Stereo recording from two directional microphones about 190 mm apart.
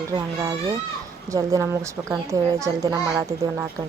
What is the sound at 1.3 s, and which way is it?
Speech, 15° right (ahead or behind).